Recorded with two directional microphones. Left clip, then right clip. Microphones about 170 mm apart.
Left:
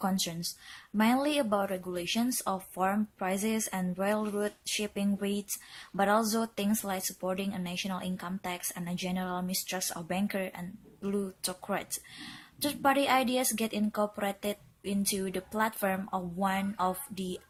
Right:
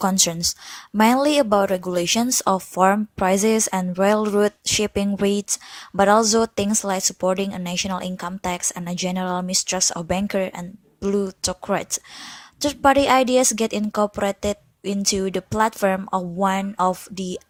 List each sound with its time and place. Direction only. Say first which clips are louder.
0.0 s a woman's voice: right 13 dB; 50° right (ahead or behind)